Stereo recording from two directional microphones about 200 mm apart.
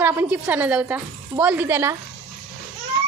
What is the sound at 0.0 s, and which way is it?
A woman's voice, 10° right (ahead or behind).